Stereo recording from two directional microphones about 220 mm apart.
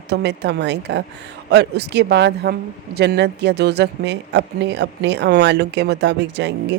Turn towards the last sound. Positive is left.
turn(degrees=-50)  # may be behind; listen again after turning